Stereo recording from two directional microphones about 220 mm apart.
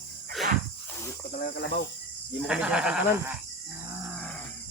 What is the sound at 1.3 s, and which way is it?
Speech, 40° left (ahead or behind).